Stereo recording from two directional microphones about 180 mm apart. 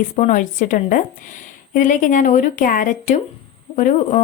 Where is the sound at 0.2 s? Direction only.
45° left (ahead or behind).